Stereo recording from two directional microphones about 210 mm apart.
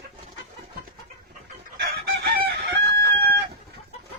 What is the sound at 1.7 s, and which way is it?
Chicken, 50° right (ahead or behind).